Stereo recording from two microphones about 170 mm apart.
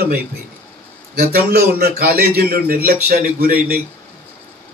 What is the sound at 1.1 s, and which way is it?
A man's voice, 65° right (ahead or behind).